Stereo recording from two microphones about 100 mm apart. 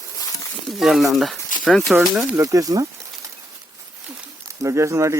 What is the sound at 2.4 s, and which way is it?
Speech, 35° right (ahead or behind).